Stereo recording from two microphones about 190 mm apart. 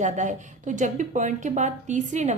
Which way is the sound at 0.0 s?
40° right (ahead or behind).